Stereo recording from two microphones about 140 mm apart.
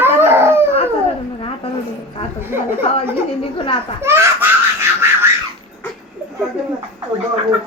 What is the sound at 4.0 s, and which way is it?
Belly laugh, 15° right (ahead or behind).